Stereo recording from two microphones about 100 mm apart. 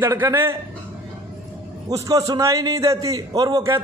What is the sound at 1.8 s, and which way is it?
A man's voice, 35° right (ahead or behind).